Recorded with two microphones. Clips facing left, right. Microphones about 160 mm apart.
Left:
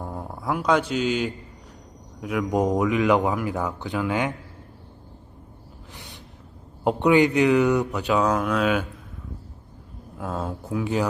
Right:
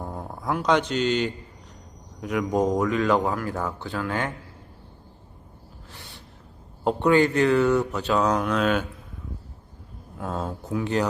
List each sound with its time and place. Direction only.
0.0 s speech: centre (ahead or behind)
5.9 s a sound: 15° left (ahead or behind)
6.8 s speech: 15° left (ahead or behind)
10.2 s speech: 5° left (ahead or behind)